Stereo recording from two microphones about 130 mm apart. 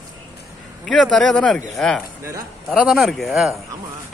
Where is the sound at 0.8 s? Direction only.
Centre (ahead or behind).